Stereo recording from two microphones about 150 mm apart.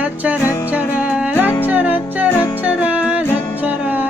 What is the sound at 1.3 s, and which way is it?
Music, 15° left (ahead or behind).